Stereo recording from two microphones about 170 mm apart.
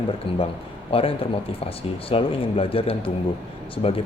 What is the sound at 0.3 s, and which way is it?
Speech, 30° left (ahead or behind).